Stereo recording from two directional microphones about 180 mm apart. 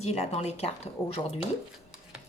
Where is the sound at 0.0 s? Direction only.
35° left (ahead or behind).